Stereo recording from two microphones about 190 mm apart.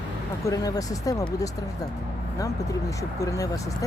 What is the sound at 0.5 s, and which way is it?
Speech, 20° left (ahead or behind).